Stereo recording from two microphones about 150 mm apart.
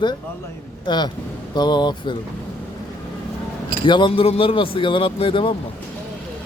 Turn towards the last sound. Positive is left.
turn(degrees=35)  # may be behind; listen again after turning